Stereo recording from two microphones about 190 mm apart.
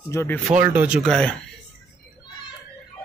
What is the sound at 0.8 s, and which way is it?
Speech, 5° right (ahead or behind).